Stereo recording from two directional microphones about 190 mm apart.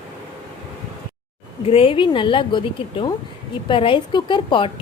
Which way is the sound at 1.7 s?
30° left (ahead or behind).